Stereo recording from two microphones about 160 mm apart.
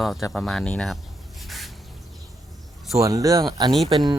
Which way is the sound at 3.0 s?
20° right (ahead or behind).